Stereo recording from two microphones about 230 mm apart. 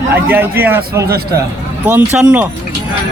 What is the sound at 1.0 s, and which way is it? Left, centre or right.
Speech, right.